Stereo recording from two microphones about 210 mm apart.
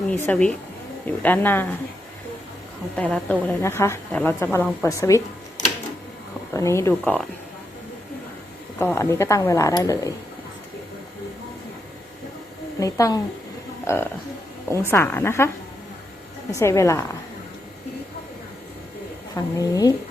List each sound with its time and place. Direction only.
0.1 s a woman's voice: 5° left (ahead or behind)
2.9 s a woman's voice: 5° left (ahead or behind)
6.5 s a woman's voice: 15° left (ahead or behind)
8.8 s a woman's voice: 10° left (ahead or behind)
12.8 s a woman's voice: 15° left (ahead or behind)
16.5 s a woman's voice: 15° left (ahead or behind)
19.3 s a woman's voice: 15° left (ahead or behind)